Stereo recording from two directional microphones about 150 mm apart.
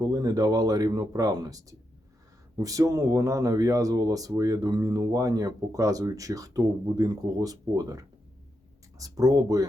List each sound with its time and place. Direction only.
0.0 s speech: 25° right (ahead or behind)